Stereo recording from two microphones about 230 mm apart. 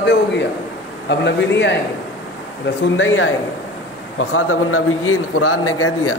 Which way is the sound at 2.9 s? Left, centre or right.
Left.